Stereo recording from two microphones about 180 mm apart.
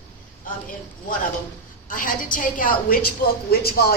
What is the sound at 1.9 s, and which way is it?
A woman's voice, 50° left (ahead or behind).